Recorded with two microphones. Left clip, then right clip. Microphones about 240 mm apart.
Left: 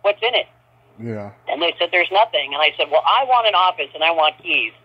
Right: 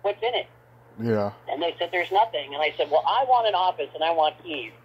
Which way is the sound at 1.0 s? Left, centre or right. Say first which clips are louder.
Right 5 dB; centre.